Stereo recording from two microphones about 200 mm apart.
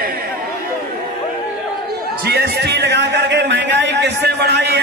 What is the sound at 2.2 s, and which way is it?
A man's voice, 55° right (ahead or behind).